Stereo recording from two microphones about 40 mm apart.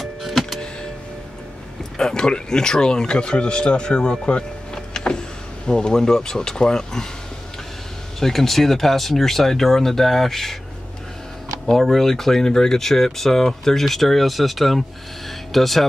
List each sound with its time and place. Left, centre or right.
2.0 s speech: centre
4.9 s power windows: left
5.7 s speech: centre
8.2 s speech: centre
11.6 s speech: centre